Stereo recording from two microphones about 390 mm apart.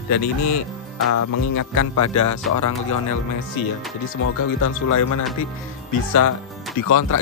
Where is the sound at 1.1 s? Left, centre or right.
Left.